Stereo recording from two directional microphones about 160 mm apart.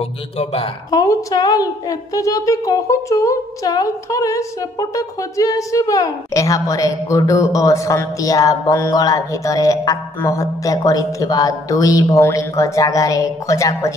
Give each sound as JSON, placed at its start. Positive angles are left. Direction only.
{"t": 0.4, "sound": "speech", "side_deg": 40}
{"t": 0.8, "sound": "a woman's voice", "side_deg": 25}